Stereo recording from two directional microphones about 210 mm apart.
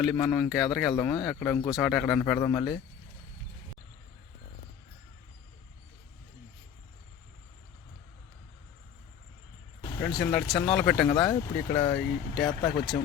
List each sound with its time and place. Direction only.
0.0 s speech: centre (ahead or behind)
0.9 s speech: 15° left (ahead or behind)
1.2 s speech: centre (ahead or behind)
10.1 s speech: 20° left (ahead or behind)
10.8 s speech: 5° left (ahead or behind)
11.1 s speech: 20° left (ahead or behind)
11.9 s speech: centre (ahead or behind)